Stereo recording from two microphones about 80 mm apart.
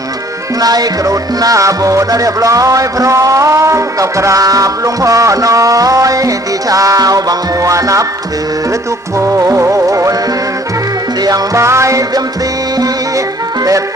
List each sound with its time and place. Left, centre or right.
0.6 s music: right
9.1 s music: right
11.5 s music: right